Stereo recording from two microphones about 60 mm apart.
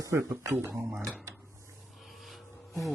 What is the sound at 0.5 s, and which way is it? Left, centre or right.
Speech, right.